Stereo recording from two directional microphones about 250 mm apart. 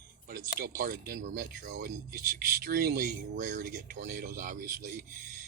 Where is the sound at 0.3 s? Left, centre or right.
Right.